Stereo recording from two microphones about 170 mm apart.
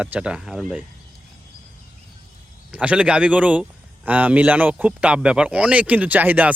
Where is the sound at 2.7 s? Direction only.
5° right (ahead or behind).